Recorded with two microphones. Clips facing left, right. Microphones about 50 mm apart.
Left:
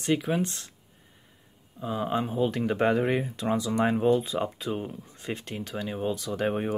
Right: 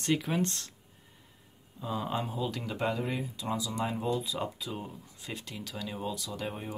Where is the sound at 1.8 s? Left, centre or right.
Left.